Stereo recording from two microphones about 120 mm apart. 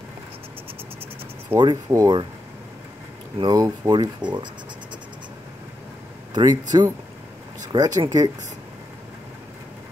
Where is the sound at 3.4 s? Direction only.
35° right (ahead or behind).